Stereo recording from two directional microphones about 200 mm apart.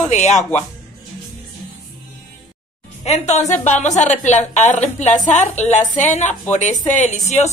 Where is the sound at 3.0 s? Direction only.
35° left (ahead or behind).